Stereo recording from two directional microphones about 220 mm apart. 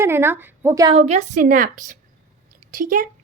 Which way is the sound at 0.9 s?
30° right (ahead or behind).